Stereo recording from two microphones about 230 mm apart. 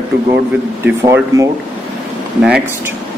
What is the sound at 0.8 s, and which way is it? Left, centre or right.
Speech, centre.